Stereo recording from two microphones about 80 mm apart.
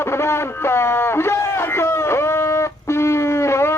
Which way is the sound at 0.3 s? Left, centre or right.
Left.